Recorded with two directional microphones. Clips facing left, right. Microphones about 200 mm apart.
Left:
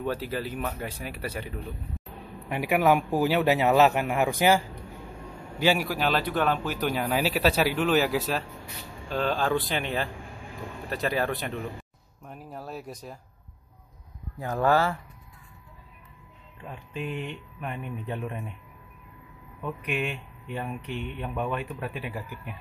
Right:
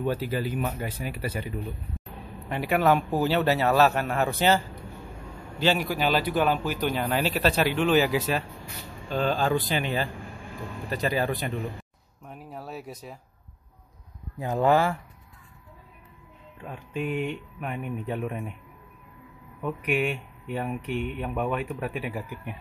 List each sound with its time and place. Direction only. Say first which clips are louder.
0.0 s a man's voice: right 3 dB; centre (ahead or behind)
2.5 s a man's voice: even; 10° left (ahead or behind)
14.4 s speech: right 2 dB; 20° right (ahead or behind)
16.6 s speech: right 4 dB; 5° right (ahead or behind)
19.6 s speech: right 4 dB; 10° right (ahead or behind)